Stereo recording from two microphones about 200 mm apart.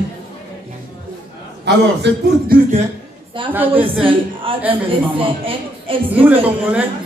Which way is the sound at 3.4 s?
10° right (ahead or behind).